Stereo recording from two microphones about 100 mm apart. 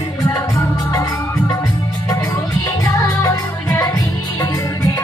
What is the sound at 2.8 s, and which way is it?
Music, 30° left (ahead or behind).